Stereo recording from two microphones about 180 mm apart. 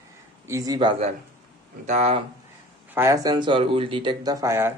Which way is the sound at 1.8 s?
40° right (ahead or behind).